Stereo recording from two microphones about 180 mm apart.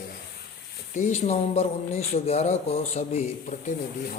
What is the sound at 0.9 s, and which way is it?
Speech, 40° left (ahead or behind).